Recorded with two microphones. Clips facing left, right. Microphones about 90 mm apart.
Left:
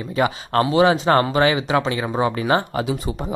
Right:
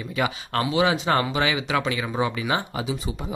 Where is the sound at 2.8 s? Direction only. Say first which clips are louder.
Left 5 dB; 55° left (ahead or behind).